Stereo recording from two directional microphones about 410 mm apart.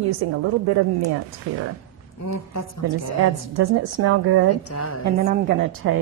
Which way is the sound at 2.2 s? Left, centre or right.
Left.